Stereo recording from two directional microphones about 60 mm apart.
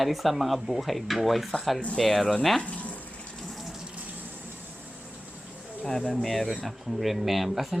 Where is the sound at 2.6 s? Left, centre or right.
Left.